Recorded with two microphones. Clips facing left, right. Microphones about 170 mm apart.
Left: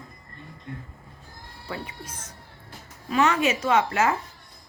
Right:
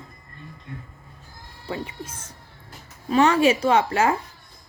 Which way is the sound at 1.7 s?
25° right (ahead or behind).